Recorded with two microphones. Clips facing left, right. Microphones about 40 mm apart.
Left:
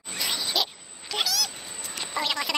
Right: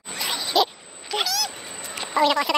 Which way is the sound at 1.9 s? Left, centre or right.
Centre.